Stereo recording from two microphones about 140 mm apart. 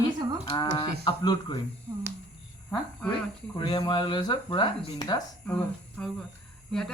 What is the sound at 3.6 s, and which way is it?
Speech, 35° left (ahead or behind).